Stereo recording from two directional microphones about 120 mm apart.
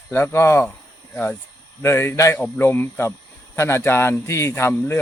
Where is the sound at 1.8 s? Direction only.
20° left (ahead or behind).